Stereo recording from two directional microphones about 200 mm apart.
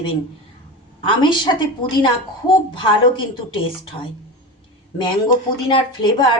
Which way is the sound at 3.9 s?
25° left (ahead or behind).